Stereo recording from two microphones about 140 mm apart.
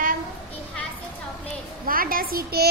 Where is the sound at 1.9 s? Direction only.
90° right.